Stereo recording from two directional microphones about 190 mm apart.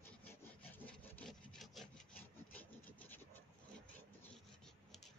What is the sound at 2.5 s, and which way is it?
Rub, 10° left (ahead or behind).